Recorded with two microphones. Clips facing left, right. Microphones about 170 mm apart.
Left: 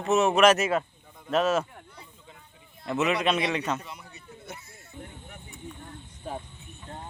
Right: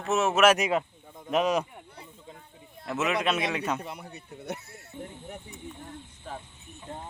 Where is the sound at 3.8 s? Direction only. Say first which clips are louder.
Right 4 dB; 55° right (ahead or behind).